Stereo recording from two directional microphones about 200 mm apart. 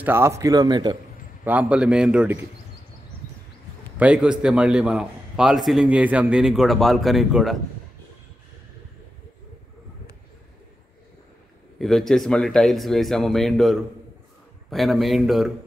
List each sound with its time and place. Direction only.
0.0 s a man's voice: 10° right (ahead or behind)
1.4 s a man's voice: 10° right (ahead or behind)
4.0 s a man's voice: 5° right (ahead or behind)
11.8 s a man's voice: centre (ahead or behind)